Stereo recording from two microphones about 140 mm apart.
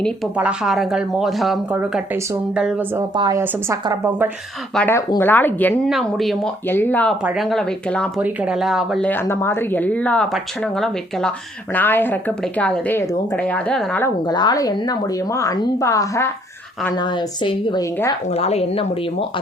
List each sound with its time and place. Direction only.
0.3 s speech: 5° right (ahead or behind)
1.7 s speech: 10° right (ahead or behind)
3.2 s a woman's voice: 30° right (ahead or behind)
4.9 s speech: 20° left (ahead or behind)
5.9 s speech: centre (ahead or behind)
6.7 s speech: 15° left (ahead or behind)
7.3 s speech: centre (ahead or behind)
8.2 s speech: 10° right (ahead or behind)
9.0 s speech: 15° left (ahead or behind)
14.3 s a woman's voice: 30° left (ahead or behind)
16.9 s a woman's voice: 30° left (ahead or behind)
18.3 s a woman's voice: 50° left (ahead or behind)